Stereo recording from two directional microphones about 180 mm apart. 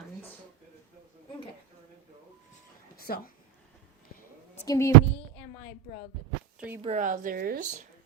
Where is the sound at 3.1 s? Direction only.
55° left (ahead or behind).